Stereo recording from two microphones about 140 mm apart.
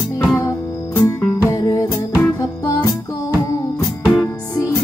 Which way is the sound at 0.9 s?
15° left (ahead or behind).